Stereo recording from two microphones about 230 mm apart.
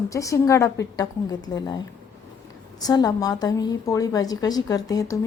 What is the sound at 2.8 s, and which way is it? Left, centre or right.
A woman's voice, centre.